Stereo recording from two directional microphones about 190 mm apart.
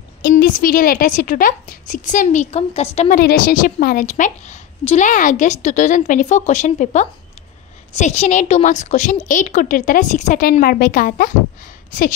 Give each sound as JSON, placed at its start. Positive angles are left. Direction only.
{"t": 0.3, "sound": "a woman's voice", "side_deg": 45}
{"t": 3.2, "sound": "a woman's voice", "side_deg": 50}